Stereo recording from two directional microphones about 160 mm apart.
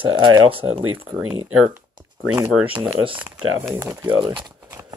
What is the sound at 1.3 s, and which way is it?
Speech, 10° right (ahead or behind).